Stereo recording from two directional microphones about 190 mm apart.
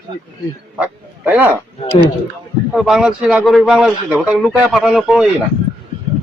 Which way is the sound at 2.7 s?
Centre (ahead or behind).